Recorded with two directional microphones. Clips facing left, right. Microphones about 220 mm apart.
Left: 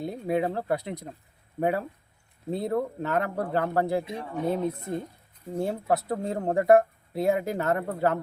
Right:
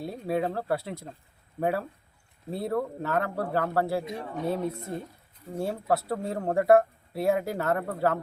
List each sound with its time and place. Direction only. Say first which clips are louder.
0.0 s speech: left 2 dB; 20° left (ahead or behind)